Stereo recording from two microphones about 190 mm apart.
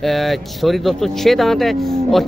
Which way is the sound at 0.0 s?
Centre (ahead or behind).